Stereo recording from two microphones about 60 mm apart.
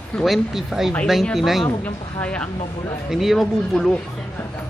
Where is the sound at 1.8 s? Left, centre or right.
Left.